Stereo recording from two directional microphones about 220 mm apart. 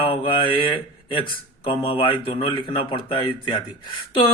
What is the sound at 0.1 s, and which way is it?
Mantra, 20° left (ahead or behind).